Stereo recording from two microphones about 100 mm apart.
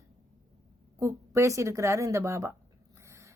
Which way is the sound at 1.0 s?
30° right (ahead or behind).